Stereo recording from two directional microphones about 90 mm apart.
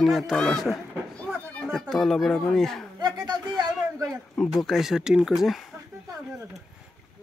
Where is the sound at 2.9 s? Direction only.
55° right (ahead or behind).